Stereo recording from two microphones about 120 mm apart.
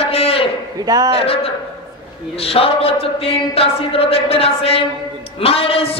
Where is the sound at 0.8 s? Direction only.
35° right (ahead or behind).